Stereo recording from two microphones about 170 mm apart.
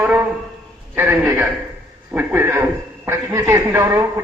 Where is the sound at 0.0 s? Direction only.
10° right (ahead or behind).